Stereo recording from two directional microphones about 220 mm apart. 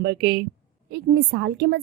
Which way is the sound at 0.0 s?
50° right (ahead or behind).